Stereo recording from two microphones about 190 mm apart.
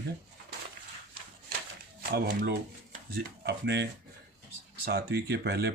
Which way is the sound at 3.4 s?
60° right (ahead or behind).